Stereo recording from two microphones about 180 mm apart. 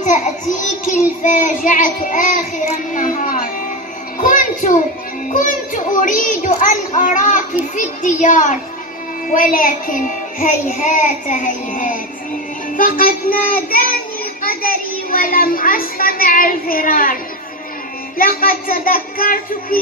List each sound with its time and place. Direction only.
0.8 s child singing: 45° left (ahead or behind)
4.2 s a sound: 45° left (ahead or behind)
5.3 s child singing: 45° left (ahead or behind)
14.4 s a child's voice: 55° left (ahead or behind)
18.1 s child singing: 55° left (ahead or behind)